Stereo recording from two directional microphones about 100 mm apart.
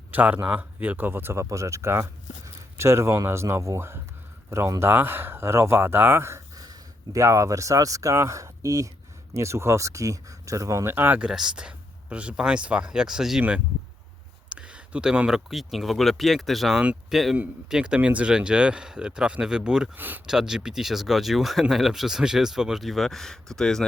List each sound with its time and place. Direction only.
0.1 s speech: 15° right (ahead or behind)
6.6 s speech: 40° right (ahead or behind)
10.9 s speech: 20° right (ahead or behind)
11.3 s speech: 5° right (ahead or behind)
14.5 s speech: 10° right (ahead or behind)
20.0 s speech: 20° right (ahead or behind)
20.2 s speech: 5° right (ahead or behind)